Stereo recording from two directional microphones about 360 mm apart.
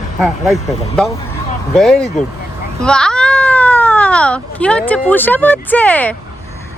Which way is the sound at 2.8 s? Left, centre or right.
Centre.